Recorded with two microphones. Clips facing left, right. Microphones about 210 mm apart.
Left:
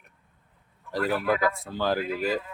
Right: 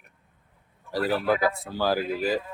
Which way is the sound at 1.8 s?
5° right (ahead or behind).